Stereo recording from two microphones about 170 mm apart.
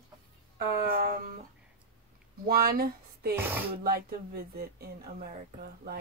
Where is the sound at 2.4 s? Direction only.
60° right (ahead or behind).